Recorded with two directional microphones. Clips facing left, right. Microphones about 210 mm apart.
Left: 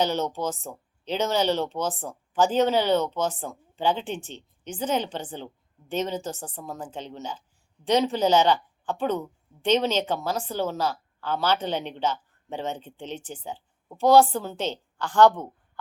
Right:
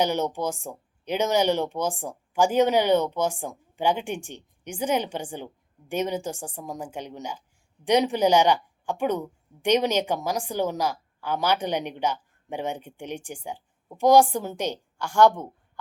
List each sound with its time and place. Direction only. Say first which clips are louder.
0.0 s a woman's voice: right 1 dB; 15° right (ahead or behind)